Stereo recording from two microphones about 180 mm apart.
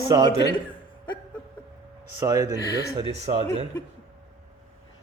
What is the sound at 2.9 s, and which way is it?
Speech, 35° right (ahead or behind).